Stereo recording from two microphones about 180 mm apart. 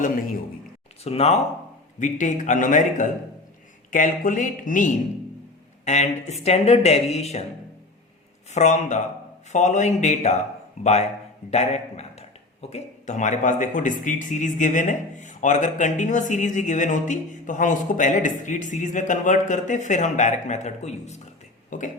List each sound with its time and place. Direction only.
0.0 s speech: 50° left (ahead or behind)
1.0 s speech: 35° left (ahead or behind)
8.5 s speech: 40° left (ahead or behind)
21.7 s a sound: 45° left (ahead or behind)